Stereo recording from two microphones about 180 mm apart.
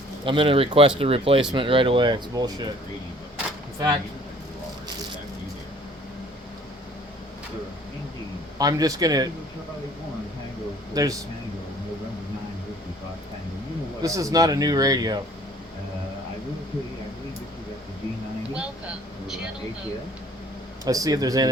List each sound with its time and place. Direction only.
0.3 s speech: 30° right (ahead or behind)
3.8 s speech: 25° right (ahead or behind)
8.5 s speech: 20° right (ahead or behind)
10.9 s speech: 20° right (ahead or behind)
14.0 s speech: 20° right (ahead or behind)
18.5 s vehicle: 5° right (ahead or behind)
20.8 s speech: 20° right (ahead or behind)